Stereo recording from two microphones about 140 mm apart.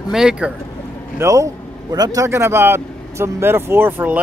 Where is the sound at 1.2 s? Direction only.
25° right (ahead or behind).